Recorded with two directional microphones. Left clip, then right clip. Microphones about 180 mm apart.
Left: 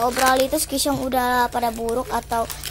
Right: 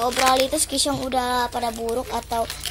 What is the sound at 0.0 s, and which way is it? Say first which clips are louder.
Speech: left 1 dB; 10° left (ahead or behind).